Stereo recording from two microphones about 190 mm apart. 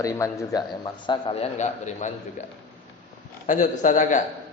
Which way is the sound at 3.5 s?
40° left (ahead or behind).